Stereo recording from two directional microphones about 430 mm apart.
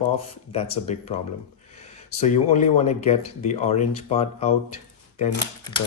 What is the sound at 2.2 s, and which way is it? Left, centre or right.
Speech, centre.